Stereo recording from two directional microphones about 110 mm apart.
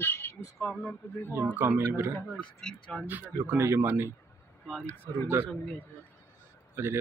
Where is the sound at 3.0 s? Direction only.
15° right (ahead or behind).